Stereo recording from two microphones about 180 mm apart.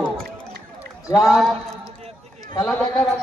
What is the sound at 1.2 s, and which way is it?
Speech, centre (ahead or behind).